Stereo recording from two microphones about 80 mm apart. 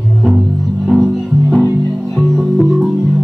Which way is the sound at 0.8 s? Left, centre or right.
Centre.